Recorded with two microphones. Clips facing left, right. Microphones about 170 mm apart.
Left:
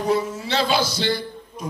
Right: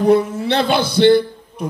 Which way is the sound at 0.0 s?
60° right (ahead or behind).